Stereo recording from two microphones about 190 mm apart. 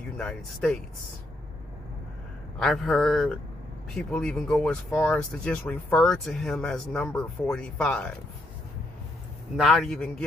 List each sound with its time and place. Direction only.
0.2 s speech: 5° left (ahead or behind)
2.6 s speech: 5° left (ahead or behind)
9.6 s speech: centre (ahead or behind)